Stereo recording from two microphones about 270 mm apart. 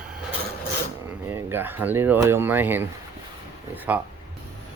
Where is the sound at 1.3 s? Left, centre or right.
Centre.